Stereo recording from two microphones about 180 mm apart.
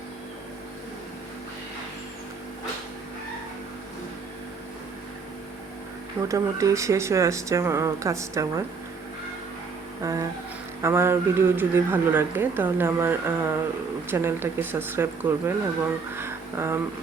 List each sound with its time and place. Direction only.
6.2 s speech: 20° right (ahead or behind)
10.0 s a sound: 20° right (ahead or behind)
10.8 s speech: 15° right (ahead or behind)